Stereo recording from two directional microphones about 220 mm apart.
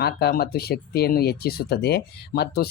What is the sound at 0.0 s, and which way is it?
Speech, 45° left (ahead or behind).